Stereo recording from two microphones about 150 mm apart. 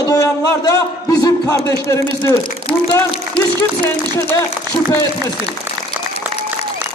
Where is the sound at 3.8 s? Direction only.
15° left (ahead or behind).